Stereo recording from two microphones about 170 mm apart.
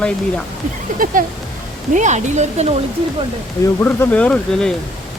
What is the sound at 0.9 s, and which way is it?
Speech, 55° right (ahead or behind).